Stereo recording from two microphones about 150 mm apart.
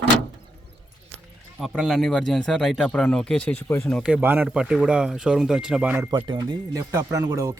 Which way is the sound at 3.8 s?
Centre (ahead or behind).